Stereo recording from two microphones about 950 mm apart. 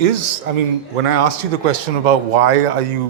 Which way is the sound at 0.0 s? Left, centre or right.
Right.